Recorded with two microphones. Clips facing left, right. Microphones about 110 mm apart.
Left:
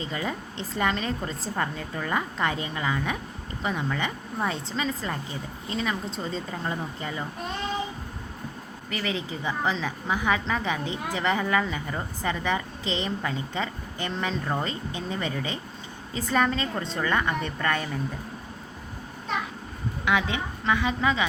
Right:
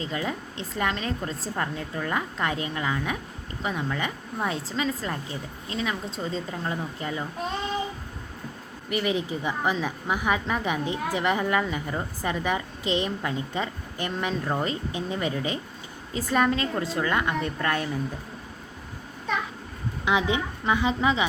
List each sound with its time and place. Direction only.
0.0 s a woman's voice: centre (ahead or behind)
8.9 s a woman's voice: 10° right (ahead or behind)
20.1 s speech: 20° right (ahead or behind)